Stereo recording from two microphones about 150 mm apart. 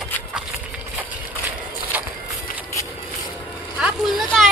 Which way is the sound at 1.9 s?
10° right (ahead or behind).